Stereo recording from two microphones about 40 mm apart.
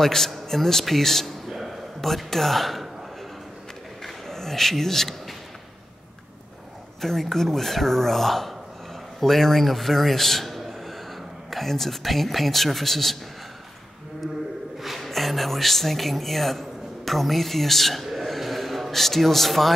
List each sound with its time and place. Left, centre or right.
0.0 s speech: centre
1.5 s a sound: centre
2.0 s a man's voice: centre
4.0 s a sound: centre
7.0 s a man's voice: centre
15.0 s speech: centre